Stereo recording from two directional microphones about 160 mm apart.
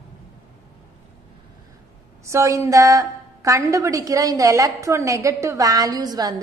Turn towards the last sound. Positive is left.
turn(degrees=-25)  # may be behind; listen again after turning